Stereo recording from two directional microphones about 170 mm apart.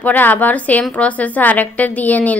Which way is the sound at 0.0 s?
10° left (ahead or behind).